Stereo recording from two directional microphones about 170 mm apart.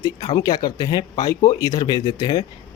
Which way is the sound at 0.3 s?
20° left (ahead or behind).